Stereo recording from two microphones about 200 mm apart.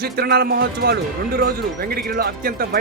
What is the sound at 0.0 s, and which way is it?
Speech, 50° right (ahead or behind).